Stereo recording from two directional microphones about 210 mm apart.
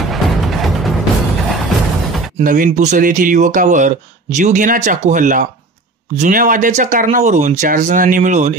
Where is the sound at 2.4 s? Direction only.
40° right (ahead or behind).